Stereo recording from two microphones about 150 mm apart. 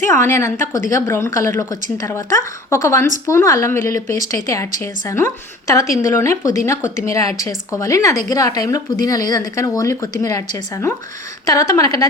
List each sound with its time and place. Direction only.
0.0 s a woman's voice: 15° left (ahead or behind)